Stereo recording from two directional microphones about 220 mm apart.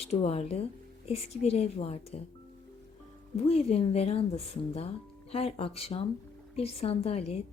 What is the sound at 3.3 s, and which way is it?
Speech, 25° left (ahead or behind).